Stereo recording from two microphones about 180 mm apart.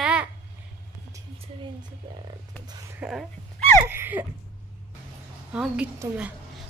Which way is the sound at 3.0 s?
Centre (ahead or behind).